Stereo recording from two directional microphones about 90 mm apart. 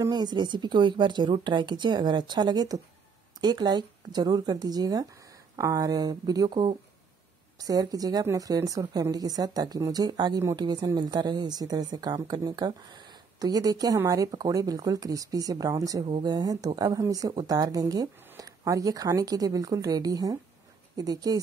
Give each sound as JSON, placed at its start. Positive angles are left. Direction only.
{"t": 0.1, "sound": "speech", "side_deg": -55}